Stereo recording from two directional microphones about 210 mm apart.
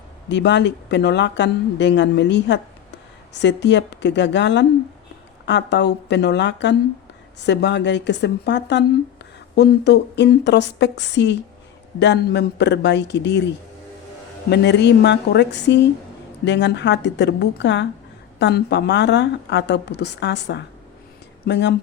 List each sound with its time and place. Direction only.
0.3 s speech: 55° left (ahead or behind)
14.5 s speech: 55° left (ahead or behind)